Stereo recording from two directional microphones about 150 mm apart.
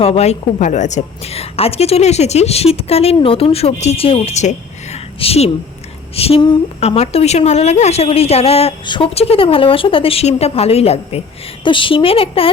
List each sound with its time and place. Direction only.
0.0 s a woman's voice: 45° left (ahead or behind)